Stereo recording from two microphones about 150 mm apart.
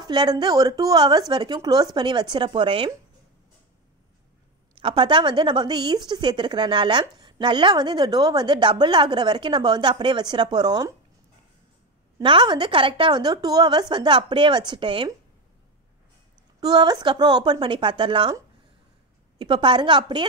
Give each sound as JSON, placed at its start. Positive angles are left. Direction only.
{"t": 0.0, "sound": "a woman's voice", "side_deg": -30}
{"t": 4.7, "sound": "a woman's voice", "side_deg": -35}
{"t": 12.2, "sound": "a woman's voice", "side_deg": -30}
{"t": 16.6, "sound": "a woman's voice", "side_deg": -25}
{"t": 19.3, "sound": "a woman's voice", "side_deg": -30}